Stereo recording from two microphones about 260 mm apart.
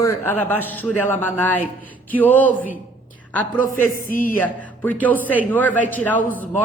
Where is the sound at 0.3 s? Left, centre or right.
Centre.